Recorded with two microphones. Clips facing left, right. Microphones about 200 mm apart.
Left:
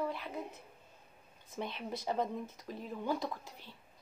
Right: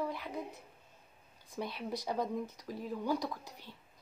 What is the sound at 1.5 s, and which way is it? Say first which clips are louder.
Speech: right 1 dB; 15° right (ahead or behind).